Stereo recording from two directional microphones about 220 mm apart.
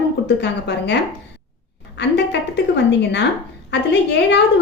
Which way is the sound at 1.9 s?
50° left (ahead or behind).